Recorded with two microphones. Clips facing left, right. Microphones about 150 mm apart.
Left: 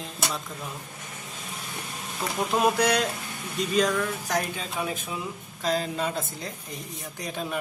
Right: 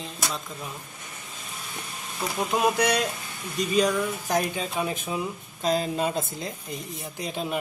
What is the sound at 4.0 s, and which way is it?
Speech, 15° right (ahead or behind).